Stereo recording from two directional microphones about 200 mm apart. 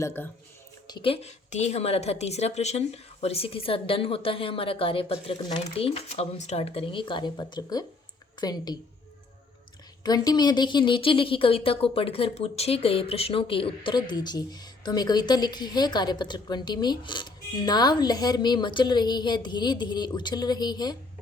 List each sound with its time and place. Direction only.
0.0 s speech: 10° left (ahead or behind)
0.9 s speech: 25° left (ahead or behind)
10.0 s speech: 20° left (ahead or behind)